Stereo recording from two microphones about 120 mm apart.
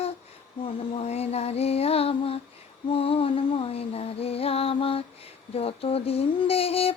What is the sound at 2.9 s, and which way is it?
Music, 50° left (ahead or behind).